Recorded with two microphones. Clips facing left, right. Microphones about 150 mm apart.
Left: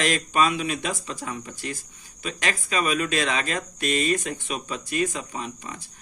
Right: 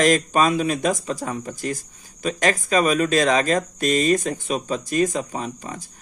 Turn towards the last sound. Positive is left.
turn(degrees=-40)  # may be behind; listen again after turning